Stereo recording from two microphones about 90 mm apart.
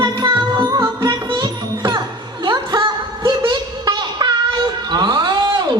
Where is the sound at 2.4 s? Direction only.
55° right (ahead or behind).